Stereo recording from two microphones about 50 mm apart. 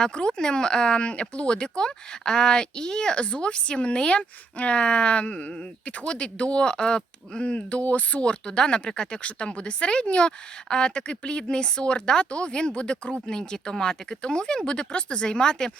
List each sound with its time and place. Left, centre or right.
0.0 s speech: centre